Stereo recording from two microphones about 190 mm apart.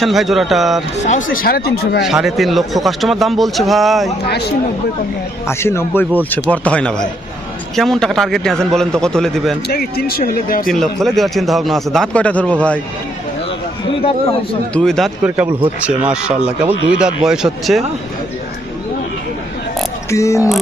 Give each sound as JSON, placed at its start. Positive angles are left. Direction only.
{"t": 0.0, "sound": "speech", "side_deg": 0}
{"t": 1.0, "sound": "speech", "side_deg": 45}
{"t": 2.0, "sound": "speech", "side_deg": 0}
{"t": 4.3, "sound": "speech", "side_deg": 60}
{"t": 5.5, "sound": "speech", "side_deg": 15}
{"t": 9.6, "sound": "speech", "side_deg": 55}
{"t": 10.7, "sound": "speech", "side_deg": 0}
{"t": 14.0, "sound": "a man's voice", "side_deg": 30}
{"t": 14.7, "sound": "speech", "side_deg": 5}
{"t": 20.1, "sound": "speech", "side_deg": 15}